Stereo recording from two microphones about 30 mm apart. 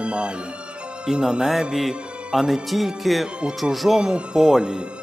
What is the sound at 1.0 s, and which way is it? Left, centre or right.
Speech, centre.